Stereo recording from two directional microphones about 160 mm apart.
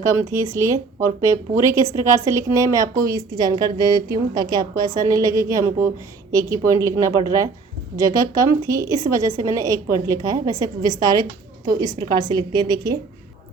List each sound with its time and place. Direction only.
0.0 s a woman's voice: 20° right (ahead or behind)